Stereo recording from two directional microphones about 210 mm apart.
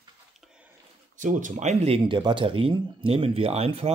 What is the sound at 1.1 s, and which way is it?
Speech, 35° right (ahead or behind).